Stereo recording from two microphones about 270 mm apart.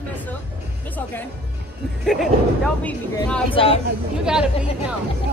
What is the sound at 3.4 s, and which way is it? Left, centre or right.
Speech, centre.